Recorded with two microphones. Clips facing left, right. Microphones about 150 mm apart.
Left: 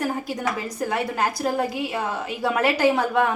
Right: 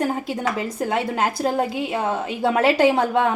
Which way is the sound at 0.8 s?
25° right (ahead or behind).